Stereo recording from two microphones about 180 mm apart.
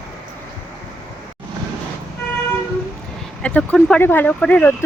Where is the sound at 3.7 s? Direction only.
5° left (ahead or behind).